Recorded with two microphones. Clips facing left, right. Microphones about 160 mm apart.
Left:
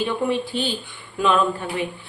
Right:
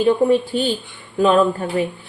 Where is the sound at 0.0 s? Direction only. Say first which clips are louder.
Right 8 dB; 40° right (ahead or behind).